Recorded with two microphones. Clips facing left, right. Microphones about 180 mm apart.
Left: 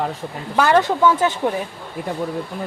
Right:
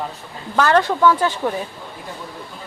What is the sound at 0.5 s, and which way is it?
Speech, 10° left (ahead or behind).